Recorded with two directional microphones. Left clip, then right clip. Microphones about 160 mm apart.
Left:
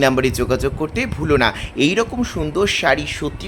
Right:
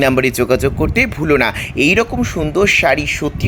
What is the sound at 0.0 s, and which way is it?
Speech, 25° right (ahead or behind).